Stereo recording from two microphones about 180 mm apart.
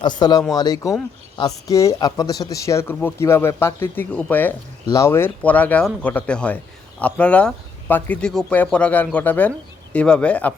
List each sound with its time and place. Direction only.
0.0 s speech: 25° left (ahead or behind); by 10.5 s 5° left (ahead or behind)